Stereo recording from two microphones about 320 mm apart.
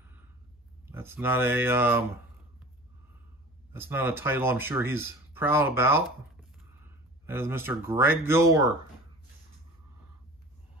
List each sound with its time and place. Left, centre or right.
0.8 s speech: centre
3.7 s speech: centre